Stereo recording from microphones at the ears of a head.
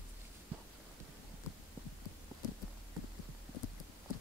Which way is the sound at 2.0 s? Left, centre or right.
Left.